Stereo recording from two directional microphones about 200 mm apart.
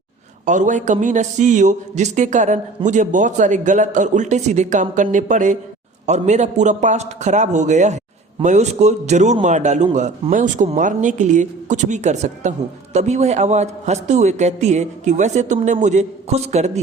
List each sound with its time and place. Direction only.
0.4 s a man's voice: 40° right (ahead or behind)